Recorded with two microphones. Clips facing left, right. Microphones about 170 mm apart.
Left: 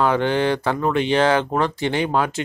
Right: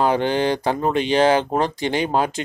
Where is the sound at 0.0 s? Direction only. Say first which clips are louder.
Even; 15° right (ahead or behind).